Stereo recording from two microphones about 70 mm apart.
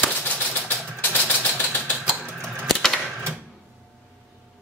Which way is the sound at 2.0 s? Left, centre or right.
Right.